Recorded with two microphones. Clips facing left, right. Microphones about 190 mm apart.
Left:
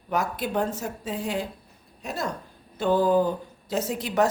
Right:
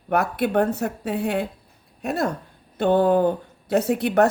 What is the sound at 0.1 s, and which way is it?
Speech, 60° right (ahead or behind).